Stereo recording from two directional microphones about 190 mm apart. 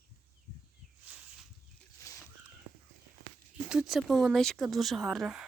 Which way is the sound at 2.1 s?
15° left (ahead or behind).